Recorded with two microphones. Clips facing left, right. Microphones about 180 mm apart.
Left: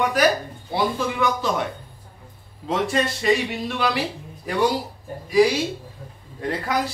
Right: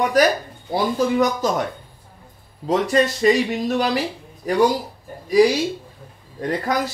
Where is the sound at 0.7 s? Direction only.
40° right (ahead or behind).